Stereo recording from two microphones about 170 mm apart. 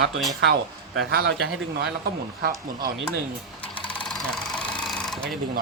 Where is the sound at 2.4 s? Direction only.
70° right (ahead or behind).